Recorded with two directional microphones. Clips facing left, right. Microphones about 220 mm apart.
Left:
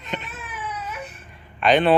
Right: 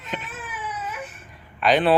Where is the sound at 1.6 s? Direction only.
Centre (ahead or behind).